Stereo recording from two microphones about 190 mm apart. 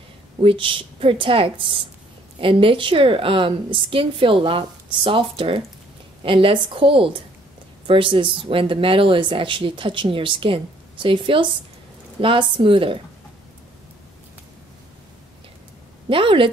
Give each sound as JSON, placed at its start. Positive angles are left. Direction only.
{"t": 0.4, "sound": "speech", "side_deg": -30}
{"t": 16.1, "sound": "speech", "side_deg": -25}